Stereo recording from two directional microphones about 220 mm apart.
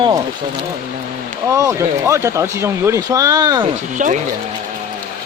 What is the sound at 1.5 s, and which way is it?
Speech, 15° right (ahead or behind).